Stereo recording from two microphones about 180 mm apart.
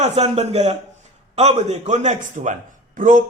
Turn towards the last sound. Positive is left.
turn(degrees=-45)  # may be behind; listen again after turning